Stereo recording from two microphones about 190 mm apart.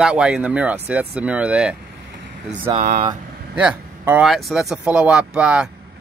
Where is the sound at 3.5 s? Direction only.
10° right (ahead or behind).